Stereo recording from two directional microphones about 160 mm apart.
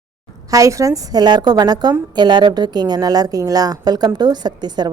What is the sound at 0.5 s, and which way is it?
A woman's voice, 20° right (ahead or behind).